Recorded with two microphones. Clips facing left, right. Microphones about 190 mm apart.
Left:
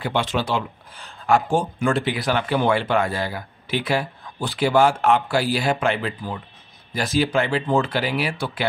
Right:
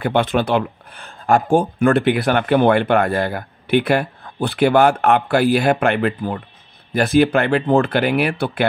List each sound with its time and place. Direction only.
0.0 s speech: 55° right (ahead or behind)